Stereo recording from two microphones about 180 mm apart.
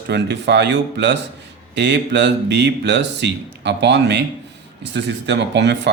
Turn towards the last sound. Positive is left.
turn(degrees=-75)  # may be behind; listen again after turning